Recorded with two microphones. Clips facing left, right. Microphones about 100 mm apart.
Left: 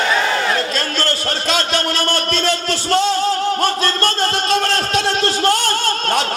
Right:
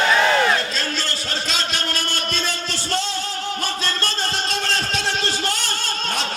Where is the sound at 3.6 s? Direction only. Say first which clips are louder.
Left 8 dB; 55° left (ahead or behind).